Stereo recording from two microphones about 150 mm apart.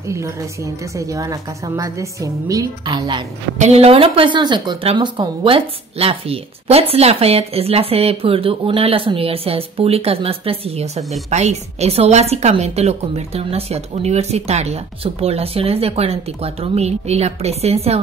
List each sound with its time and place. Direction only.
0.1 s a woman's voice: 20° right (ahead or behind)
3.5 s a woman's voice: 45° right (ahead or behind)